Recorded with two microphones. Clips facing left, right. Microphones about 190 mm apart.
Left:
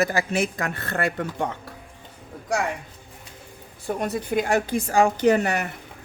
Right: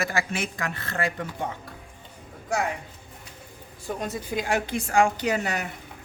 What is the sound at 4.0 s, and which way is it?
Speech, 60° left (ahead or behind).